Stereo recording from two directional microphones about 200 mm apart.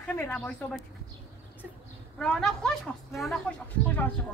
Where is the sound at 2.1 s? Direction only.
5° left (ahead or behind).